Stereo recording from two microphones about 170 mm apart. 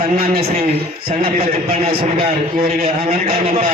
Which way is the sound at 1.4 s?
35° right (ahead or behind).